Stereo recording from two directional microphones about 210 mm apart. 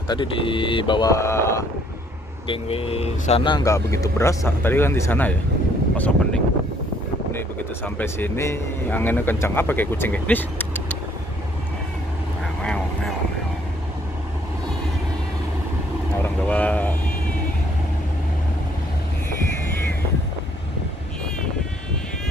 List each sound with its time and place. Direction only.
0.1 s speech: 25° left (ahead or behind)
2.4 s speech: 25° left (ahead or behind); by 11.0 s 10° left (ahead or behind)
12.6 s vehicle: 5° left (ahead or behind)
16.2 s vehicle: 5° left (ahead or behind)